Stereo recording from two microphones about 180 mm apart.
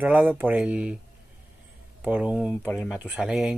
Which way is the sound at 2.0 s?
5° right (ahead or behind).